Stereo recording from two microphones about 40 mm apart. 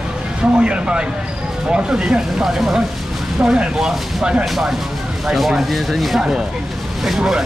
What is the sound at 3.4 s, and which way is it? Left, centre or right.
Speech, right.